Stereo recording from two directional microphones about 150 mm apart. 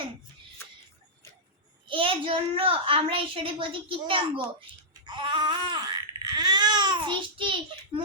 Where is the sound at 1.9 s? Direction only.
35° right (ahead or behind).